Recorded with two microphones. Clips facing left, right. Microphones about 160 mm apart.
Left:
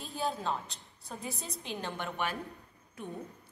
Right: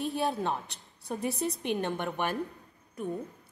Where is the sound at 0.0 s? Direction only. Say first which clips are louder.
Right 5 dB; 65° right (ahead or behind).